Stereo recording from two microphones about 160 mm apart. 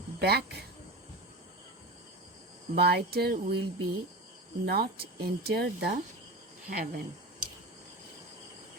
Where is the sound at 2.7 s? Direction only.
85° right.